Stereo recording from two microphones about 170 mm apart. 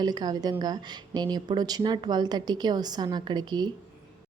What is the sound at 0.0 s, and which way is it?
Speech, 25° right (ahead or behind).